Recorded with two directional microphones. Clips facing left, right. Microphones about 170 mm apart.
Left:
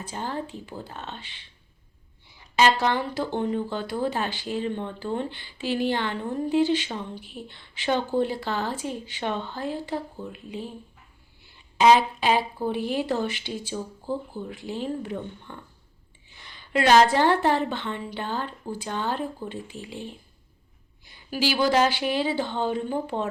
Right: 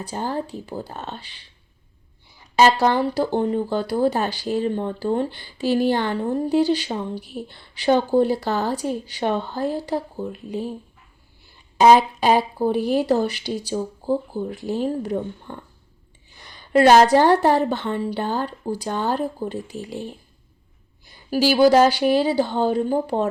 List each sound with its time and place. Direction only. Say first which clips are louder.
0.0 s speech: right 5 dB; 35° right (ahead or behind)
2.6 s speech: right 5 dB; 40° right (ahead or behind)
11.8 s speech: right 4 dB; 40° right (ahead or behind)